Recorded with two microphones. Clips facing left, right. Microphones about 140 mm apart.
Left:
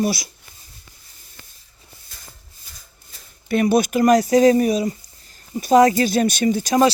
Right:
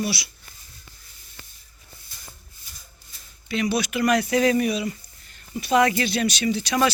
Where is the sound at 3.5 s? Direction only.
50° left (ahead or behind).